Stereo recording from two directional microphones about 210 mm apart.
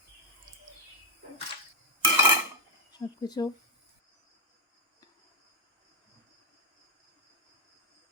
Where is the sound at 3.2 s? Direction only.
20° left (ahead or behind).